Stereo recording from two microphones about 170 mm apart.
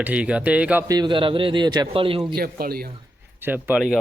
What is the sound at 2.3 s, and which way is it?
Speech, 65° right (ahead or behind).